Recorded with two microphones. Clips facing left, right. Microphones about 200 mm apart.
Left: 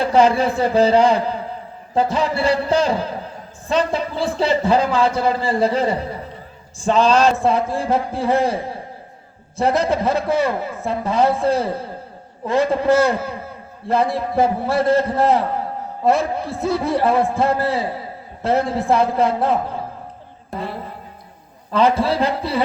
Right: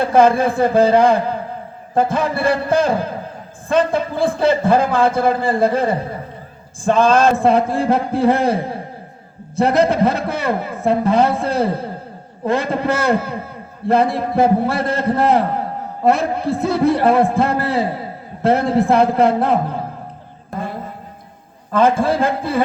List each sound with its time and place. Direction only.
0.0 s a man's voice: 50° right (ahead or behind)
21.7 s a man's voice: 50° right (ahead or behind)